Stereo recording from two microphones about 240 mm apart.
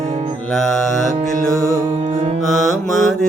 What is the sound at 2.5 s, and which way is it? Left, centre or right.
Mantra, centre.